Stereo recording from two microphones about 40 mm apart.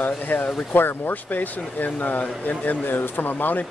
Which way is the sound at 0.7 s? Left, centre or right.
Left.